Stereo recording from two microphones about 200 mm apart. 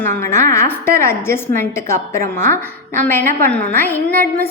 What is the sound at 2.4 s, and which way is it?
Speech, 40° right (ahead or behind).